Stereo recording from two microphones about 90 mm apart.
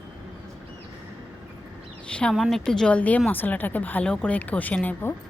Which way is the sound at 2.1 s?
10° left (ahead or behind).